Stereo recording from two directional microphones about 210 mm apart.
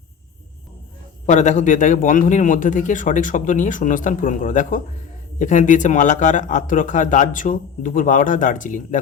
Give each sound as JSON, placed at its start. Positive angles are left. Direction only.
{"t": 1.3, "sound": "speech", "side_deg": 35}